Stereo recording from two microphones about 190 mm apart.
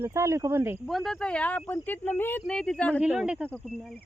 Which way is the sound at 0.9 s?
Centre (ahead or behind).